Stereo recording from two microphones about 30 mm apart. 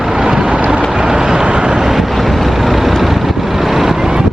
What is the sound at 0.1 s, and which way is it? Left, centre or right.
Boat, right.